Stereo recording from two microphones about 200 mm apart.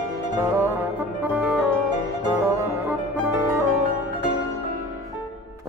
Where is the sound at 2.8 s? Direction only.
10° right (ahead or behind).